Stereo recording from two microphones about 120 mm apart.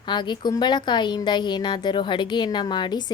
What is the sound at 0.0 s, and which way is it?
A woman's voice, 40° left (ahead or behind).